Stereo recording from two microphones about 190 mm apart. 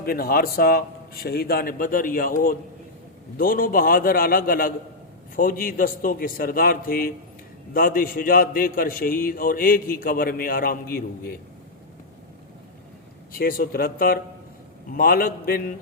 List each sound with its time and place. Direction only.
0.0 s a man's voice: 50° left (ahead or behind)
13.3 s a man's voice: 50° left (ahead or behind)